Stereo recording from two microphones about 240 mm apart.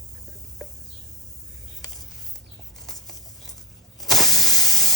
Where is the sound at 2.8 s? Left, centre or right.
Centre.